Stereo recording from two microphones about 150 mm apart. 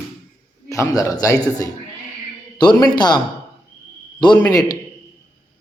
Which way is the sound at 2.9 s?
30° left (ahead or behind).